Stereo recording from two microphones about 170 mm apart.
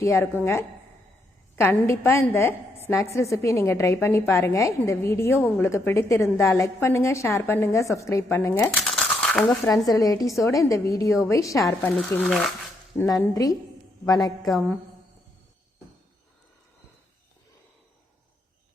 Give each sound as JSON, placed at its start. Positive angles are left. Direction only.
{"t": 0.0, "sound": "a woman's voice", "side_deg": 15}
{"t": 1.5, "sound": "a woman's voice", "side_deg": 15}
{"t": 8.7, "sound": "crumpling", "side_deg": 0}
{"t": 9.9, "sound": "a woman's voice", "side_deg": 20}
{"t": 11.6, "sound": "speech", "side_deg": 5}
{"t": 13.0, "sound": "a woman's voice", "side_deg": 20}